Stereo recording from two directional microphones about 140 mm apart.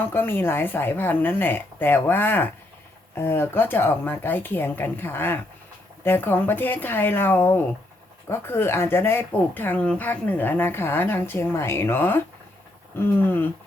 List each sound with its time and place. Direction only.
0.1 s speech: 15° left (ahead or behind)